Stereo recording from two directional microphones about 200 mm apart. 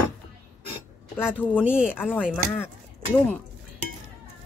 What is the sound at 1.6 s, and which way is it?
Speech, 5° right (ahead or behind).